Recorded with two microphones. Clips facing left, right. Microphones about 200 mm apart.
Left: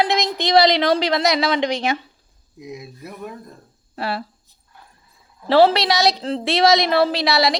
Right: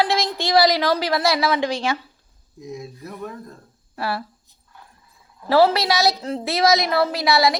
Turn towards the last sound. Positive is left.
turn(degrees=25)  # may be behind; listen again after turning